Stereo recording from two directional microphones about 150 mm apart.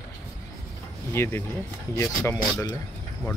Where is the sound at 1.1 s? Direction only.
15° left (ahead or behind).